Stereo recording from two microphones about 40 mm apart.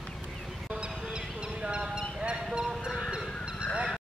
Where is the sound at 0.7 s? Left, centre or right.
Right.